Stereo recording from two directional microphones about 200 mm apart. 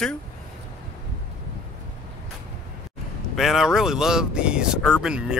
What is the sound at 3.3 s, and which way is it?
Speech, centre (ahead or behind).